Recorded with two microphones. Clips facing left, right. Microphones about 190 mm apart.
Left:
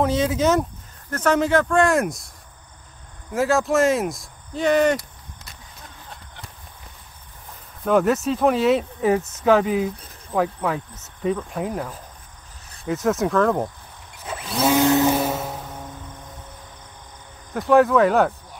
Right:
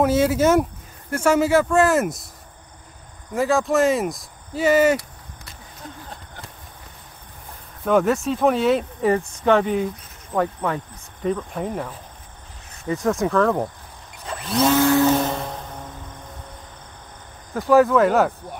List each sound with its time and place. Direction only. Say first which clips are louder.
0.0 s speech: right 2 dB; 5° right (ahead or behind)
3.3 s speech: even; centre (ahead or behind)
7.8 s speech: even; centre (ahead or behind)
14.2 s a sound: right 2 dB; 5° left (ahead or behind)
14.7 s a sound: even; 20° left (ahead or behind)
15.1 s music: even; 5° left (ahead or behind)
17.6 s speech: even; centre (ahead or behind)